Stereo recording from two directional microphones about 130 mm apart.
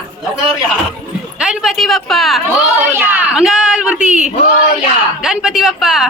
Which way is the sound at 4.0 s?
65° right (ahead or behind).